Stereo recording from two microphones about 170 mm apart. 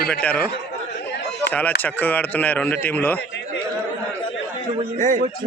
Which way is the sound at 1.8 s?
10° left (ahead or behind).